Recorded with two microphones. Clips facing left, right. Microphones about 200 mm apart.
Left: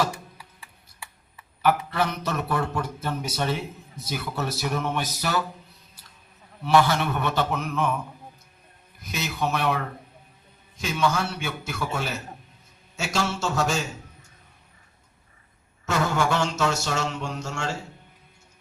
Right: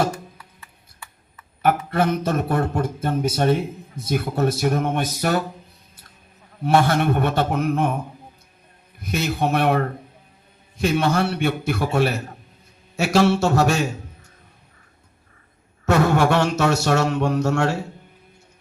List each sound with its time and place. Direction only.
0.1 s music: 10° left (ahead or behind)
1.6 s a man's voice: 50° right (ahead or behind)
6.8 s a man's voice: 55° right (ahead or behind)
9.0 s a man's voice: 55° right (ahead or behind)
15.9 s a man's voice: 65° right (ahead or behind)